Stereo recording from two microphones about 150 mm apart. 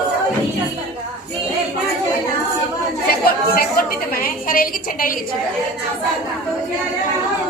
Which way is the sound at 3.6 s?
75° left (ahead or behind).